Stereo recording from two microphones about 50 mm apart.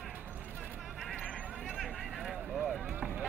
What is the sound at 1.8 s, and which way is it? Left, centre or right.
Vehicle, centre.